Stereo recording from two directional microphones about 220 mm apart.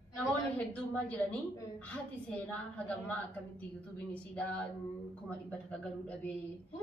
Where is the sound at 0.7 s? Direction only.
5° left (ahead or behind).